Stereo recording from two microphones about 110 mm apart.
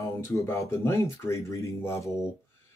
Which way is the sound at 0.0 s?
25° left (ahead or behind).